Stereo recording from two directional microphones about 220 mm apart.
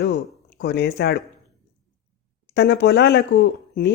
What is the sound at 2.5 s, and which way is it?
Speech, 50° left (ahead or behind).